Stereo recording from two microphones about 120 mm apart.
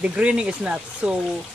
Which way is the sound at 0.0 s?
10° right (ahead or behind).